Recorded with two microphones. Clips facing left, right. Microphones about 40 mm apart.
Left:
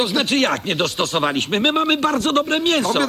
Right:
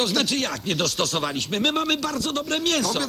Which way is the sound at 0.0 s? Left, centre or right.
Left.